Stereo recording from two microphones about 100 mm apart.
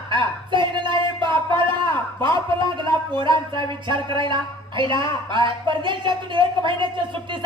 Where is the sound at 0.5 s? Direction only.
55° right (ahead or behind).